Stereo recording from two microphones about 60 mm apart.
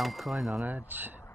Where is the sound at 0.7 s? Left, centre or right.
Right.